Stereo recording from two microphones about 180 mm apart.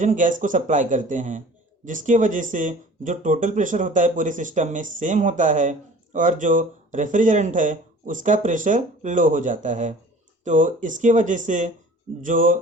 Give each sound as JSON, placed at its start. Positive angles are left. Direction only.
{"t": 0.0, "sound": "speech", "side_deg": -45}